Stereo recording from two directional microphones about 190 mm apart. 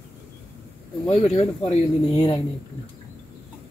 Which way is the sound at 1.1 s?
30° left (ahead or behind).